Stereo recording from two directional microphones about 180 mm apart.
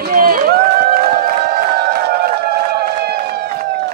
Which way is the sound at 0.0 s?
50° right (ahead or behind).